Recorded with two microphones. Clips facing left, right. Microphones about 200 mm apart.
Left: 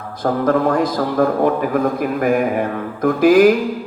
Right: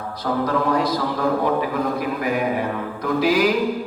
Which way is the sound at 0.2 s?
50° left (ahead or behind).